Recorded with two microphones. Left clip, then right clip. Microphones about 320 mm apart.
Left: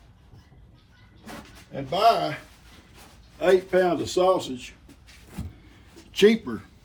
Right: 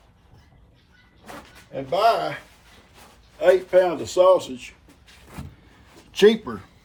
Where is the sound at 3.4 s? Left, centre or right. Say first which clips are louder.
Right 3 dB; right.